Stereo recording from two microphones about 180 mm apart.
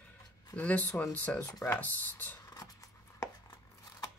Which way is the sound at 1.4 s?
20° left (ahead or behind).